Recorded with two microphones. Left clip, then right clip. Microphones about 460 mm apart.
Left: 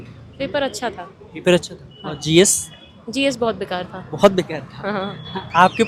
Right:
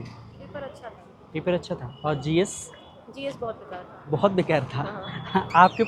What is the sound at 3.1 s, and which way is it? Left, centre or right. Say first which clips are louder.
Speech: left 12 dB; left.